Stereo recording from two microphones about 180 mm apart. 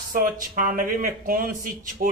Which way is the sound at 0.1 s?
50° right (ahead or behind).